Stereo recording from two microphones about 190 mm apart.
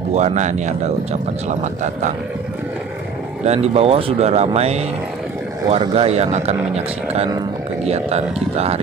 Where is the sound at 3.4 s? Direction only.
35° right (ahead or behind).